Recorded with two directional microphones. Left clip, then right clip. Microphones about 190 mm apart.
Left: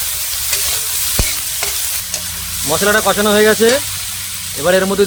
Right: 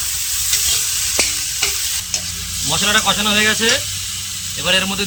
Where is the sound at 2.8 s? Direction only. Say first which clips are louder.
Left 3 dB; 35° left (ahead or behind).